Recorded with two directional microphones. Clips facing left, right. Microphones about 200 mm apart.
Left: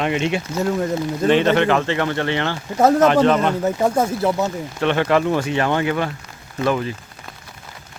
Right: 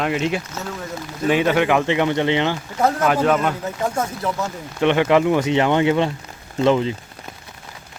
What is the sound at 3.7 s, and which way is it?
Speech, 30° left (ahead or behind).